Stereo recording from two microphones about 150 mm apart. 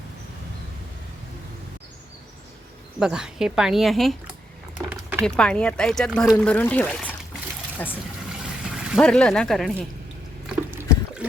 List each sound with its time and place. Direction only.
3.0 s speech: 5° right (ahead or behind)
4.8 s a sound: 15° right (ahead or behind)
5.2 s speech: 5° left (ahead or behind)
9.0 s speech: 5° left (ahead or behind)
10.8 s water: 10° right (ahead or behind)